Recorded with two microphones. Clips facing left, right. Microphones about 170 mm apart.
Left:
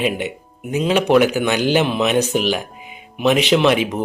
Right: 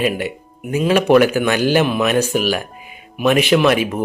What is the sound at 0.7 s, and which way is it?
Speech, 20° left (ahead or behind).